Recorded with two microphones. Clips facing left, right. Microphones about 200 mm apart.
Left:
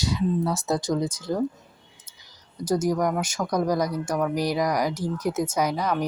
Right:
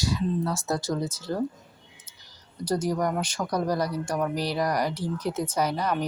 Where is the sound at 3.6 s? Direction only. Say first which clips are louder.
Left 2 dB; 15° left (ahead or behind).